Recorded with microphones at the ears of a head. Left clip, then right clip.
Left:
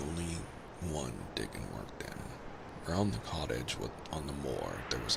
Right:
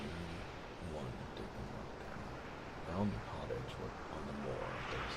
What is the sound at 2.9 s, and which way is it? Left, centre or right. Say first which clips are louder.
Speech: left 7 dB; left.